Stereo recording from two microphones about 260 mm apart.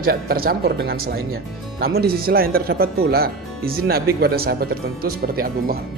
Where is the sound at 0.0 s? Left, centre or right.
Right.